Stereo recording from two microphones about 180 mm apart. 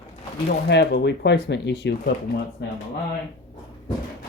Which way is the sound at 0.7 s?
70° left (ahead or behind).